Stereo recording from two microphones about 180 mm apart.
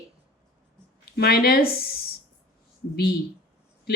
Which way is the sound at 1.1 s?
60° left (ahead or behind).